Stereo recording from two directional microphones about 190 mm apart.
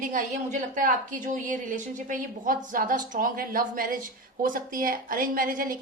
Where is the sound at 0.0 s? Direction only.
40° right (ahead or behind).